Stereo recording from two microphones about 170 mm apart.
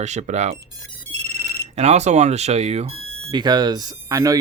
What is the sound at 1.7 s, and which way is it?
Speech, 40° right (ahead or behind).